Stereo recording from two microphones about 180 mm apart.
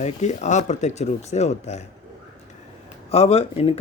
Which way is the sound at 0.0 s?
40° left (ahead or behind).